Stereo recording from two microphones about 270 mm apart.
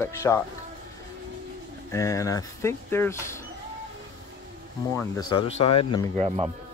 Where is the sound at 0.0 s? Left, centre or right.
Centre.